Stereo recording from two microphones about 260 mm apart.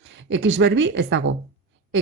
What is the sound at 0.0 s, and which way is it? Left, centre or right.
A woman's voice, right.